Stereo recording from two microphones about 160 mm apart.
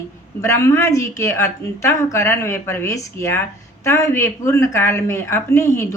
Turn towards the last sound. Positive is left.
turn(degrees=15)  # may be behind; listen again after turning